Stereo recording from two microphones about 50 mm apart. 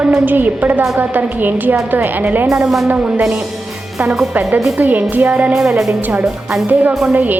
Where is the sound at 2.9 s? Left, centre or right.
Right.